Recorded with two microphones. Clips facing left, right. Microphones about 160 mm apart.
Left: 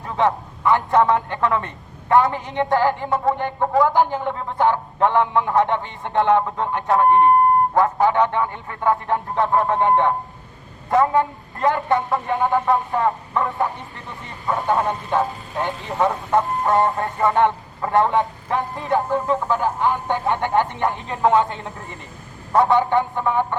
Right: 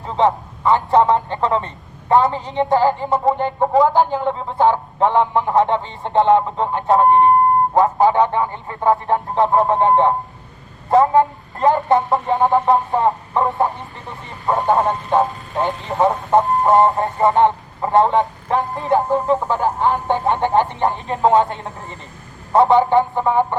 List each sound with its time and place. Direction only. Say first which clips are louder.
0.0 s speech: right 3 dB; 20° right (ahead or behind)
15.1 s speech: right 5 dB; 20° right (ahead or behind)